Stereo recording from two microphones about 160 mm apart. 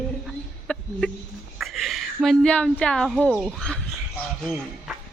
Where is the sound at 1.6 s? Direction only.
Centre (ahead or behind).